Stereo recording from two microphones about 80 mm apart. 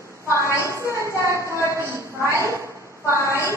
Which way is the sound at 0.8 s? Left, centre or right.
Right.